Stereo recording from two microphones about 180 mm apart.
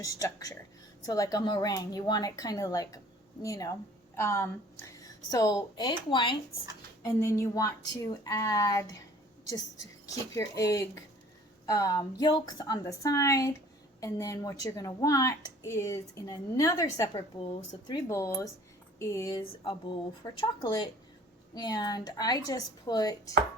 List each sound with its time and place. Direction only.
0.0 s a woman's voice: 20° left (ahead or behind)
10.3 s a woman's voice: 15° left (ahead or behind)